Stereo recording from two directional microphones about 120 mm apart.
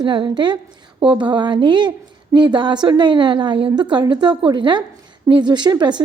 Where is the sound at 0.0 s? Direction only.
40° right (ahead or behind).